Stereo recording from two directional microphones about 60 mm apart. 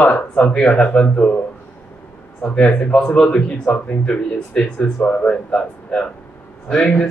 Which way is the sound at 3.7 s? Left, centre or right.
Left.